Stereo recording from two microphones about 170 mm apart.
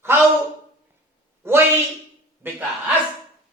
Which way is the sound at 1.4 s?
15° right (ahead or behind).